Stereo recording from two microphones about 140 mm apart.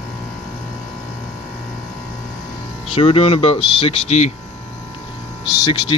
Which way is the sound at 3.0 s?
45° left (ahead or behind).